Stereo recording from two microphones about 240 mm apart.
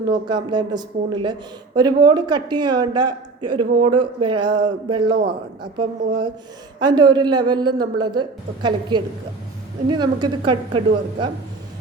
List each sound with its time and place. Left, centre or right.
0.0 s a man's voice: centre
5.1 s a man's voice: right
6.7 s a man's voice: centre